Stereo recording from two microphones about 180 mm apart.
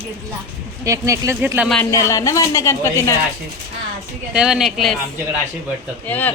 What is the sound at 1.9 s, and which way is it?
Speech, 20° left (ahead or behind).